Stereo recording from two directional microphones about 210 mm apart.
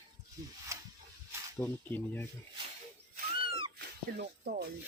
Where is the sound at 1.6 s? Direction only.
10° left (ahead or behind).